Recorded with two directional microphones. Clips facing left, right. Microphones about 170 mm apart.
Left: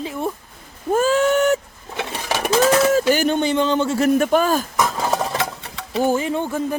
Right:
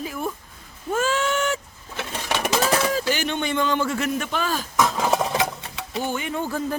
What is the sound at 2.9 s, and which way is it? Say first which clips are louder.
Speech: left 8 dB; 45° left (ahead or behind).